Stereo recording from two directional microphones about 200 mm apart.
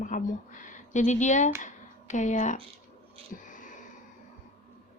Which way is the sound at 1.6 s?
35° left (ahead or behind).